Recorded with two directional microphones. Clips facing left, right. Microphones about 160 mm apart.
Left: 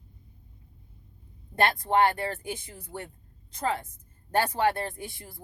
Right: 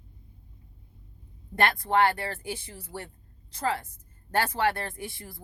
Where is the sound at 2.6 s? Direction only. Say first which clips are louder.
Even; 35° right (ahead or behind).